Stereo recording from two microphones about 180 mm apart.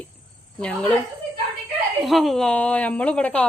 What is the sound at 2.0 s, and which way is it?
Speech, centre (ahead or behind).